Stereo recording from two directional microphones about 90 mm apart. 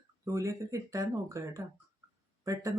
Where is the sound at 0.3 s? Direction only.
35° right (ahead or behind).